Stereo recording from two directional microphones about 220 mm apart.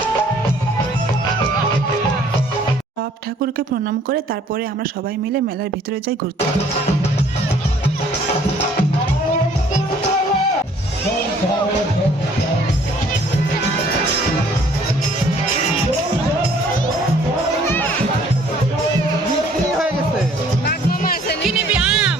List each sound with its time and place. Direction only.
20.7 s music: 45° left (ahead or behind)
21.4 s music: 5° right (ahead or behind)